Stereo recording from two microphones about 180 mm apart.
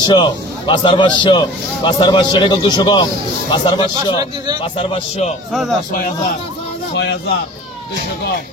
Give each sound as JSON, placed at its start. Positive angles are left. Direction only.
{"t": 0.0, "sound": "a man's voice", "side_deg": 25}
{"t": 5.5, "sound": "speech", "side_deg": 0}